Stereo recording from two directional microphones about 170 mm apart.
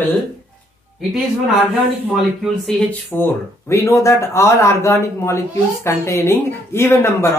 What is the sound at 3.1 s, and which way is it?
Speech, 15° left (ahead or behind).